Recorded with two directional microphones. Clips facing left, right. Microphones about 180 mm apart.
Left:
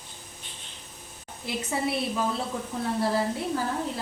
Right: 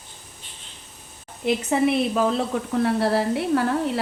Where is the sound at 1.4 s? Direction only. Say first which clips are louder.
Right 9 dB; 75° right (ahead or behind).